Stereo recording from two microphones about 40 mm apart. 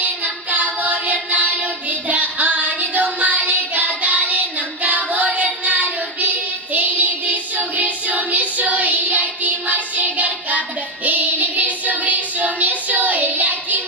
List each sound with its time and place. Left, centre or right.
0.0 s music: right
1.3 s child singing: right